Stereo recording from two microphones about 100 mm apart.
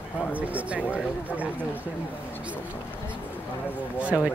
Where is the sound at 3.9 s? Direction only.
10° right (ahead or behind).